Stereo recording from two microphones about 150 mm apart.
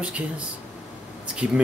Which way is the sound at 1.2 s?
10° right (ahead or behind).